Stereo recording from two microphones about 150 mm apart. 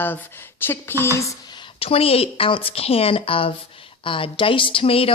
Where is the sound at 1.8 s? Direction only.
40° left (ahead or behind).